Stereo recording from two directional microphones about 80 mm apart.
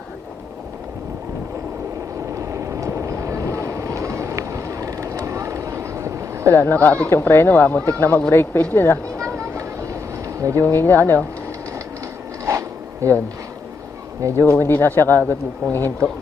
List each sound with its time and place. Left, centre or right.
2.3 s vehicle: right
6.5 s speech: left
9.1 s a sound: centre
9.6 s train: right
10.6 s speech: left
12.5 s zipper: right
14.2 s speech: right
14.5 s speech: left
15.6 s speech: right